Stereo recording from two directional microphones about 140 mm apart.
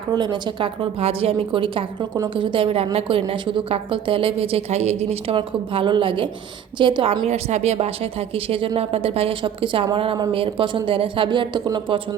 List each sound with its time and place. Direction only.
0.1 s a woman's voice: 30° right (ahead or behind)
7.3 s a woman's voice: 50° right (ahead or behind); by 11.9 s 30° right (ahead or behind)